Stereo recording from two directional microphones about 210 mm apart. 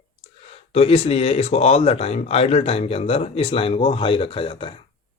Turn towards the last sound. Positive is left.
turn(degrees=25)  # may be behind; listen again after turning